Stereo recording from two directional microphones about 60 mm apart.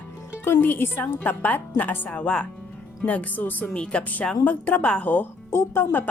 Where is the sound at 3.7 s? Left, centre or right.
Centre.